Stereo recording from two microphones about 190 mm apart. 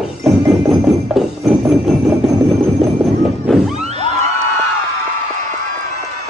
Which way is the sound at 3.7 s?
35° right (ahead or behind).